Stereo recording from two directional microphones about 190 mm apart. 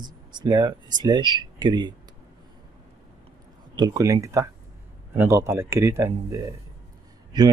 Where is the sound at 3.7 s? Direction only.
20° right (ahead or behind).